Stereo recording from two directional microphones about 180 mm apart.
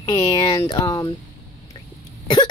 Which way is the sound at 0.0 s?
25° left (ahead or behind).